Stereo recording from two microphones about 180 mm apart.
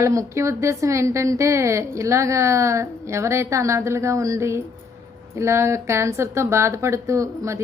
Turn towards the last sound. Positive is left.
turn(degrees=-15)  # may be behind; listen again after turning